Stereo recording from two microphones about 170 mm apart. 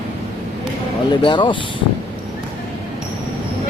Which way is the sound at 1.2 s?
30° left (ahead or behind).